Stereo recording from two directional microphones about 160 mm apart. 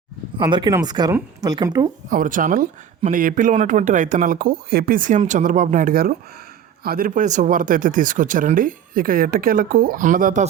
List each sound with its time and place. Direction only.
0.3 s speech: 30° right (ahead or behind)
2.0 s speech: 60° right (ahead or behind)